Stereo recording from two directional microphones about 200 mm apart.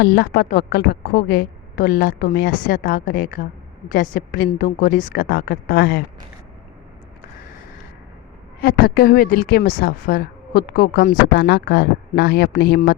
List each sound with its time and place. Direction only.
0.0 s a woman's voice: 50° left (ahead or behind)
8.6 s a woman's voice: 50° left (ahead or behind)